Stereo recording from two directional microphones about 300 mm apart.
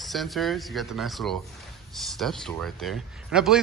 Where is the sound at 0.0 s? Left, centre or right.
Centre.